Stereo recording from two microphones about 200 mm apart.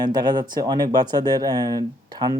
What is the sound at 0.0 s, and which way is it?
Speech, 20° right (ahead or behind).